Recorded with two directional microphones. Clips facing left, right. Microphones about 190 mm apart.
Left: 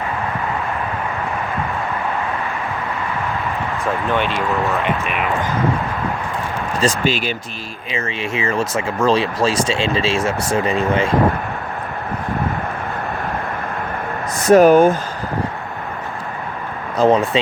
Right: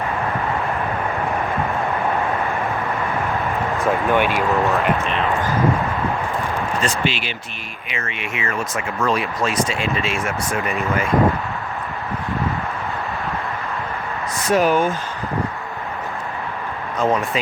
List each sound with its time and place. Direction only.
4.1 s speech: 10° right (ahead or behind)
5.0 s speech: 10° left (ahead or behind)
6.8 s speech: 40° left (ahead or behind)
7.9 s speech: 30° left (ahead or behind)
14.5 s speech: 45° left (ahead or behind)
17.0 s speech: 30° left (ahead or behind)